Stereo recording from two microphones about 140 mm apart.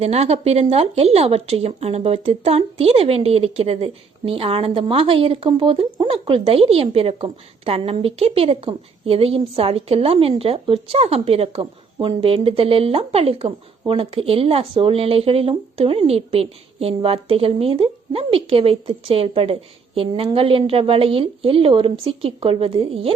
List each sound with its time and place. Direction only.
0.0 s a woman's voice: 50° right (ahead or behind)